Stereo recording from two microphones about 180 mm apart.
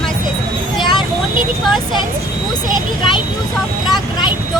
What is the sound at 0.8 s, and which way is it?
Vehicle, 25° left (ahead or behind).